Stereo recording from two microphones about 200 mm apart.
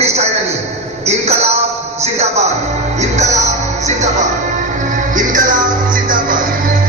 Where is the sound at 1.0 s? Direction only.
35° right (ahead or behind).